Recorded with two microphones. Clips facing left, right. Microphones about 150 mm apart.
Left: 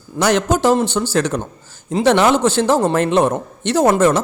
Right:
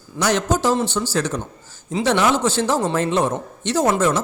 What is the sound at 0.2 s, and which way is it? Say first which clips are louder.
A man's voice: left 4 dB; 60° left (ahead or behind).